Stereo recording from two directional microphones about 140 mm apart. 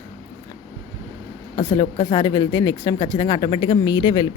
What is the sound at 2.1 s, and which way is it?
Speech, 30° left (ahead or behind).